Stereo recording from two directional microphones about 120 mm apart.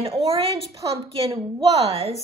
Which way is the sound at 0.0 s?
55° right (ahead or behind).